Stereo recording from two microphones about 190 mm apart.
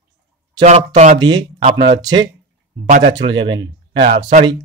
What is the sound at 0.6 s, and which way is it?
Speech, 35° right (ahead or behind).